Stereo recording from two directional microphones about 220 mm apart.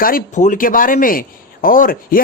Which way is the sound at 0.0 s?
35° left (ahead or behind).